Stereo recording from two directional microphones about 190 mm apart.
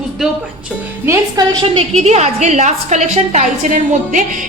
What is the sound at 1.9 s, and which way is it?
A woman's voice, 35° right (ahead or behind).